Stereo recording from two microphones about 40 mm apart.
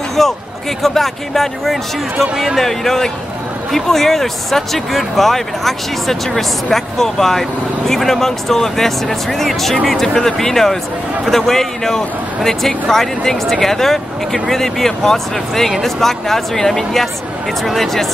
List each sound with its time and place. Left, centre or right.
0.2 s a man's voice: centre
2.6 s speech: centre